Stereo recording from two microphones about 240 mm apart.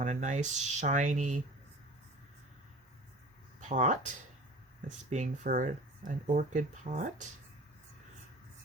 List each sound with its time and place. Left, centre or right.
0.0 s speech: right
3.6 s speech: right
5.1 s speech: right